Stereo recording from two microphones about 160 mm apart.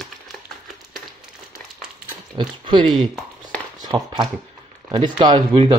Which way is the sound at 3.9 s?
25° right (ahead or behind).